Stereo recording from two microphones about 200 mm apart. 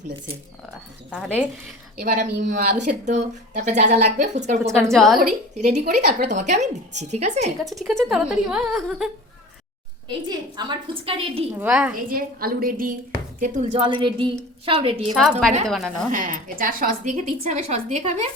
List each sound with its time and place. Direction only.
2.0 s a woman's voice: 45° right (ahead or behind)
4.9 s a woman's voice: centre (ahead or behind)
5.5 s speech: 35° right (ahead or behind)
7.6 s a woman's voice: centre (ahead or behind)
10.1 s a woman's voice: 20° right (ahead or behind)
11.5 s a woman's voice: 5° right (ahead or behind)
12.0 s a woman's voice: 45° right (ahead or behind); by 15.1 s 30° right (ahead or behind)
15.1 s a woman's voice: centre (ahead or behind)
16.1 s speech: 40° right (ahead or behind)